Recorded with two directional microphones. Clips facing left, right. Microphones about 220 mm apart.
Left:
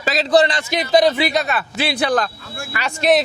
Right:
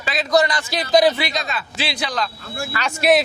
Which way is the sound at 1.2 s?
65° left (ahead or behind).